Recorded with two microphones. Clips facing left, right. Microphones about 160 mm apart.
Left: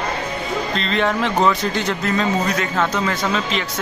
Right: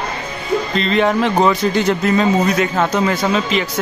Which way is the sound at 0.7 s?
5° right (ahead or behind).